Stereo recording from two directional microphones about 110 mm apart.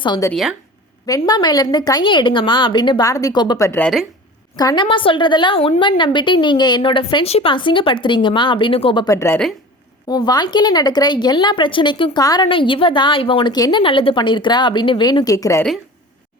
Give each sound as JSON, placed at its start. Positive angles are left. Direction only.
{"t": 1.3, "sound": "a woman's voice", "side_deg": 40}
{"t": 3.0, "sound": "a woman's voice", "side_deg": 30}
{"t": 7.3, "sound": "a woman's voice", "side_deg": 70}
{"t": 7.5, "sound": "a woman's voice", "side_deg": 50}
{"t": 9.0, "sound": "a woman's voice", "side_deg": 25}
{"t": 10.1, "sound": "a woman's voice", "side_deg": 40}
{"t": 12.5, "sound": "a woman's voice", "side_deg": 50}